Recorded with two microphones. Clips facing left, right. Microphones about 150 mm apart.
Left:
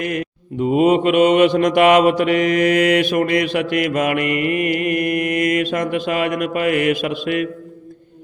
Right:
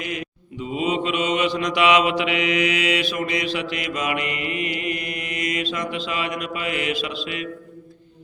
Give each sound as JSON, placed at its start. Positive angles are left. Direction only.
{"t": 0.0, "sound": "mantra", "side_deg": 55}